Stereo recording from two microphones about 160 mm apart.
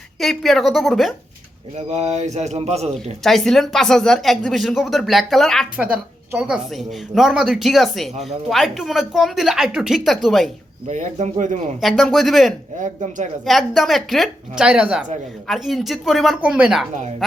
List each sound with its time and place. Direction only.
0.2 s speech: centre (ahead or behind)
1.9 s speech: 45° right (ahead or behind)
3.2 s speech: centre (ahead or behind)
5.7 s speech: 10° right (ahead or behind)
10.8 s speech: 50° right (ahead or behind)
11.8 s speech: centre (ahead or behind)
12.8 s speech: 50° right (ahead or behind)
13.4 s speech: centre (ahead or behind)